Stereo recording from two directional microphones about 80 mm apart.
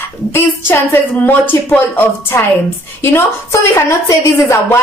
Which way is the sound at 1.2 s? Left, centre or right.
Left.